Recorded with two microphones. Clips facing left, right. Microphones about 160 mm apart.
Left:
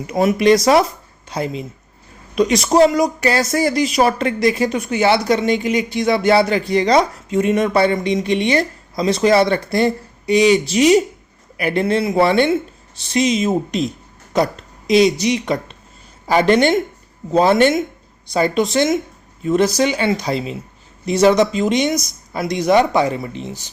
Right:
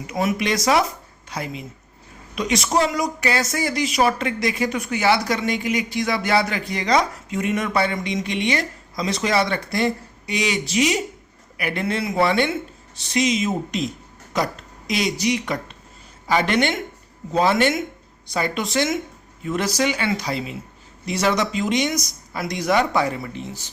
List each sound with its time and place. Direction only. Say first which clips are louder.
0.1 s a woman's voice: left 9 dB; 35° left (ahead or behind)
16.3 s speech: left 6 dB; 40° left (ahead or behind)
18.3 s speech: left 7 dB; 30° left (ahead or behind)